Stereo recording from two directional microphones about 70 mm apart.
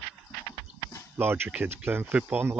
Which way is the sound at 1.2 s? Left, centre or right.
Right.